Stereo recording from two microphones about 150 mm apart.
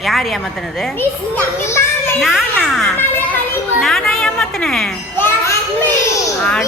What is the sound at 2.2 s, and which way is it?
Speech, centre (ahead or behind).